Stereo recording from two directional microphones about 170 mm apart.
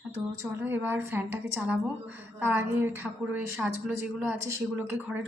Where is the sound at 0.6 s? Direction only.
10° right (ahead or behind).